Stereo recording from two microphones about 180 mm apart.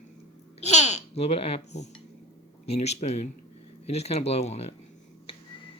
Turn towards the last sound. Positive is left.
turn(degrees=35)  # may be behind; listen again after turning